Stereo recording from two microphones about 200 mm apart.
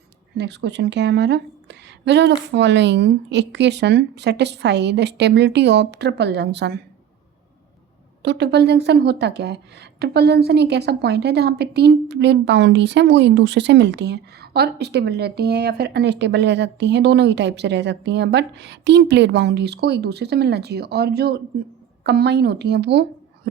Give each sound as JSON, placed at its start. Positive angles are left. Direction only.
{"t": 0.3, "sound": "a woman's voice", "side_deg": -60}
{"t": 8.2, "sound": "a woman's voice", "side_deg": -55}